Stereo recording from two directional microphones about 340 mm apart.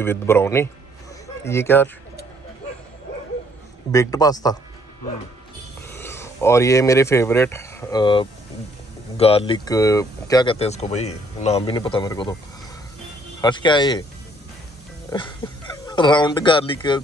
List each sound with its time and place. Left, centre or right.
0.0 s speech: centre
3.9 s speech: centre
5.9 s speech: centre
13.4 s speech: centre
15.0 s speech: centre